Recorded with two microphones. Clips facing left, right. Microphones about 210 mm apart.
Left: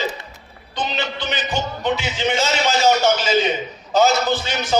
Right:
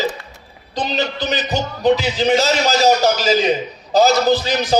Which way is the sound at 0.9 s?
40° right (ahead or behind).